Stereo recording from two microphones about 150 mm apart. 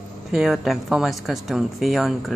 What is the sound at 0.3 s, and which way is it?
Speech, centre (ahead or behind).